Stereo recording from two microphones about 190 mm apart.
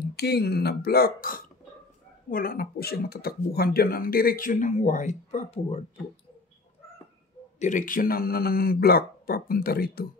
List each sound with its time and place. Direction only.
0.1 s speech: 60° left (ahead or behind); by 5.8 s 35° left (ahead or behind)
7.5 s speech: 40° left (ahead or behind)